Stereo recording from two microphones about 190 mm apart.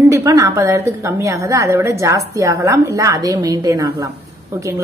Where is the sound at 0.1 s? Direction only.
15° right (ahead or behind).